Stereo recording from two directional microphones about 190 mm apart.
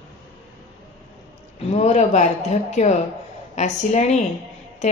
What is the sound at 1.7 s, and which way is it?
Speech, 35° left (ahead or behind).